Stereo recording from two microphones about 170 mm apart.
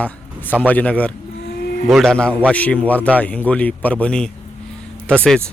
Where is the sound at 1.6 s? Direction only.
70° left (ahead or behind).